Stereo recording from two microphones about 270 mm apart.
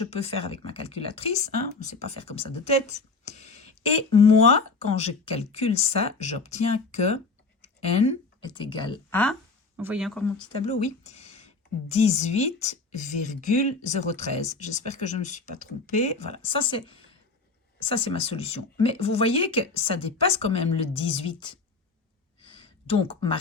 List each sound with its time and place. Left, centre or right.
0.0 s speech: left
3.2 s speech: right
4.1 s speech: left
9.7 s speech: centre
11.0 s a sound: left
11.9 s speech: left
22.4 s a sound: centre